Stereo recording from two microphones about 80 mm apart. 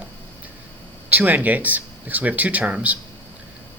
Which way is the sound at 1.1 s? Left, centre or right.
Right.